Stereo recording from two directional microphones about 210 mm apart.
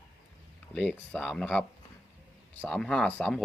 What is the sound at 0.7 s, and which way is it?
Speech, 5° left (ahead or behind).